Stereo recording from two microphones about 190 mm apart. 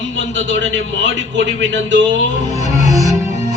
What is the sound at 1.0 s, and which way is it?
A man's voice, 70° right (ahead or behind).